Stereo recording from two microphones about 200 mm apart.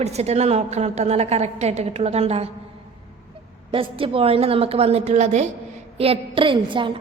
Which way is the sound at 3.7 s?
25° right (ahead or behind).